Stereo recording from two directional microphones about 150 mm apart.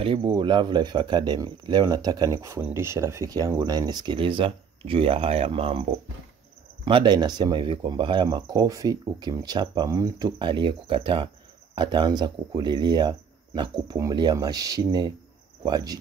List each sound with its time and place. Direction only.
0.0 s speech: 35° right (ahead or behind)